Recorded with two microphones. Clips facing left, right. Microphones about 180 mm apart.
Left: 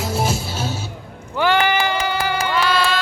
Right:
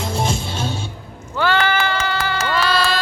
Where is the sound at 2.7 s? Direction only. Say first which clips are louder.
Right 1 dB; 35° right (ahead or behind).